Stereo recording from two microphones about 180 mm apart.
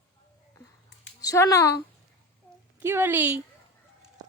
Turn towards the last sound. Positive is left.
turn(degrees=-10)  # may be behind; listen again after turning